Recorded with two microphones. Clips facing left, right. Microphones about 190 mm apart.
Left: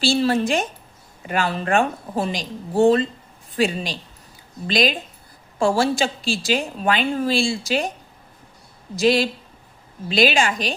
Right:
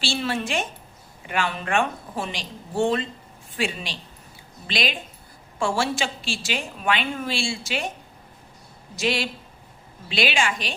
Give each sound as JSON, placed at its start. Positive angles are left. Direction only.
{"t": 0.0, "sound": "a woman's voice", "side_deg": 40}
{"t": 9.0, "sound": "a woman's voice", "side_deg": 35}